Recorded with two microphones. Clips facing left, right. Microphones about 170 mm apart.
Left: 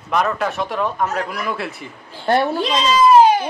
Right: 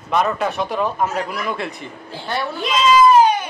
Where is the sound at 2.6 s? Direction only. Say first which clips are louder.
Right 2 dB; 35° left (ahead or behind).